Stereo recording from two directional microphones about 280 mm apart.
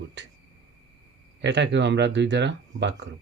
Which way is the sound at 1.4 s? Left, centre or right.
Right.